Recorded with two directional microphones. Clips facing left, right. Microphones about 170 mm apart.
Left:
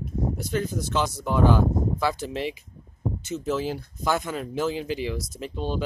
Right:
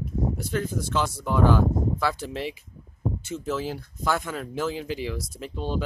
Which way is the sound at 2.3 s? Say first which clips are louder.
Left 2 dB; centre (ahead or behind).